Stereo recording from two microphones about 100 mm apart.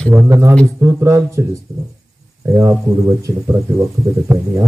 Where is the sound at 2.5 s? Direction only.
30° right (ahead or behind).